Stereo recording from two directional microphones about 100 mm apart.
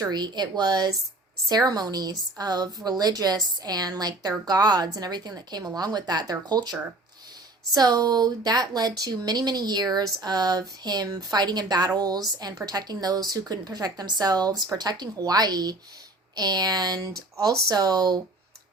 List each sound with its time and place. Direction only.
0.0 s a woman's voice: 45° right (ahead or behind)